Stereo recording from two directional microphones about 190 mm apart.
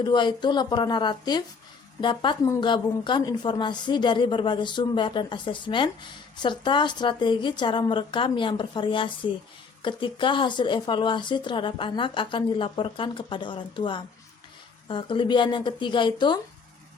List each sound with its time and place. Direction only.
0.0 s speech: 25° left (ahead or behind)